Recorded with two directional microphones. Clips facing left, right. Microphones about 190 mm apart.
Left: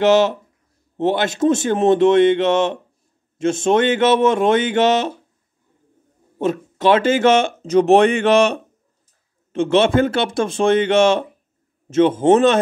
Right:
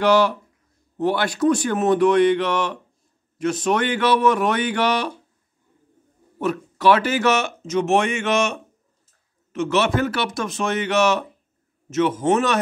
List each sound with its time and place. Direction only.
0.0 s speech: 20° left (ahead or behind)
6.3 s speech: 25° left (ahead or behind)